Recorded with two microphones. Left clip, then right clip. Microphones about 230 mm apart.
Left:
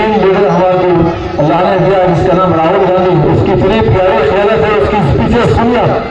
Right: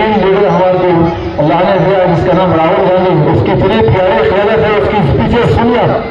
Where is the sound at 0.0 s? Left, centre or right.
Right.